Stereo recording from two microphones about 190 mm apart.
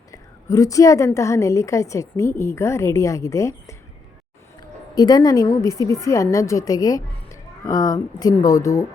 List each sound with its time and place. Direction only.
0.1 s a woman's voice: 15° left (ahead or behind)
4.9 s a woman's voice: 20° left (ahead or behind)